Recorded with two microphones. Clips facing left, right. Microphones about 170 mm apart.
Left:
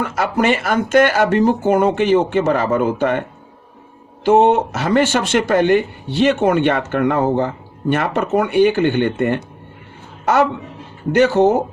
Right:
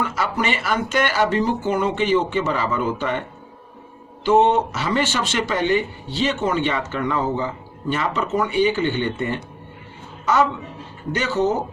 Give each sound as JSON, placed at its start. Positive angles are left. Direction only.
{"t": 0.0, "sound": "speech", "side_deg": 50}